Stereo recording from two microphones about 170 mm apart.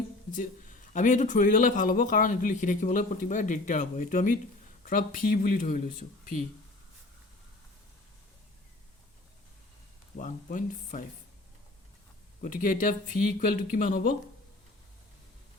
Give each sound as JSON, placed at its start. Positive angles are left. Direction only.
{"t": 0.9, "sound": "speech", "side_deg": 45}
{"t": 10.2, "sound": "speech", "side_deg": 50}
{"t": 12.4, "sound": "speech", "side_deg": 55}